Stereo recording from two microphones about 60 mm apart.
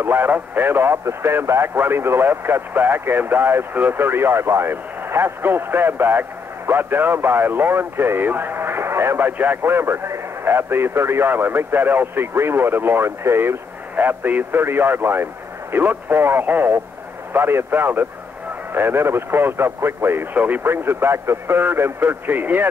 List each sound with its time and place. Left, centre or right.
0.0 s speech: right
13.9 s speech: right
20.3 s speech: right
20.6 s speech: right